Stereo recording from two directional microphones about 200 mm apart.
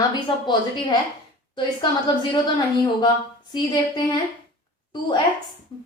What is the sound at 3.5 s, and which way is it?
Speech, 20° left (ahead or behind).